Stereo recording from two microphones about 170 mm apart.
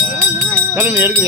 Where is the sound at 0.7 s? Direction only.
15° right (ahead or behind).